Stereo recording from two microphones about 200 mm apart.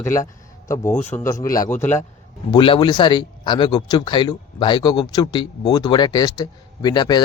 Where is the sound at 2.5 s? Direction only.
25° left (ahead or behind).